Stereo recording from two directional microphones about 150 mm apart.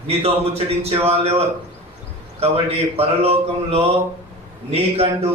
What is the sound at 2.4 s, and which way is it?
A man's voice, 40° right (ahead or behind).